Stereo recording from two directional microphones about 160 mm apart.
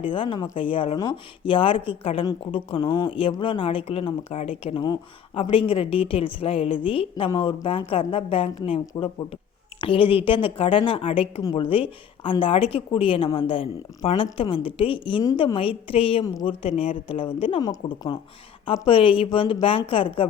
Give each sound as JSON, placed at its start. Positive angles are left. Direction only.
{"t": 0.1, "sound": "speech", "side_deg": 30}
{"t": 15.5, "sound": "speech", "side_deg": 35}